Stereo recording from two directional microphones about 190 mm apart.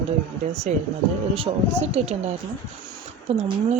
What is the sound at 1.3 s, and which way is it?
Speech, 30° right (ahead or behind).